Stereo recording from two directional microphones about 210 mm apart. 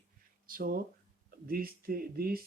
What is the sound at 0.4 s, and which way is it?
Speech, 45° right (ahead or behind).